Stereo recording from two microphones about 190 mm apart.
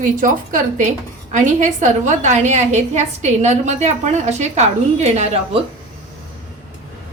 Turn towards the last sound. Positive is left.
turn(degrees=-35)  # may be behind; listen again after turning